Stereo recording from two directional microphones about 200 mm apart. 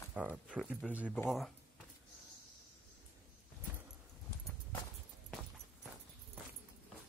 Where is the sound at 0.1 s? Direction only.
5° right (ahead or behind).